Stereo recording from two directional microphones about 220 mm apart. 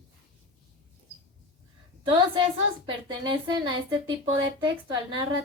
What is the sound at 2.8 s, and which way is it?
Female singing, 20° right (ahead or behind).